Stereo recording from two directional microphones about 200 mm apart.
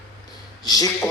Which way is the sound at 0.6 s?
20° left (ahead or behind).